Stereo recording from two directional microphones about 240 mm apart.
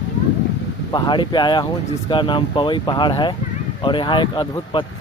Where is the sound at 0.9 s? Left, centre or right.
Centre.